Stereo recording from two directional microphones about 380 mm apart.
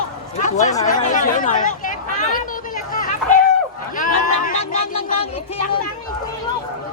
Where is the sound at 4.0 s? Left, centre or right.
Left.